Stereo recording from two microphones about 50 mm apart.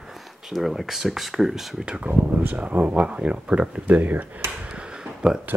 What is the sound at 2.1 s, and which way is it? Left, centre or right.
Speech, right.